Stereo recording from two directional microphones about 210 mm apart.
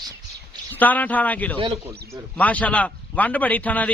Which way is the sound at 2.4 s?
5° left (ahead or behind).